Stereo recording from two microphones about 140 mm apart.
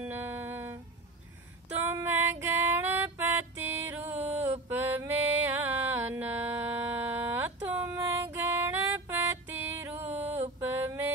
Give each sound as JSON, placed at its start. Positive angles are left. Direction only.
{"t": 0.0, "sound": "music", "side_deg": -15}
{"t": 1.9, "sound": "female singing", "side_deg": -15}
{"t": 2.4, "sound": "music", "side_deg": -15}